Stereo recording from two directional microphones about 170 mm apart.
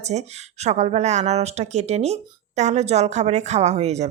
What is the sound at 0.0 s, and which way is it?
Speech, 40° right (ahead or behind).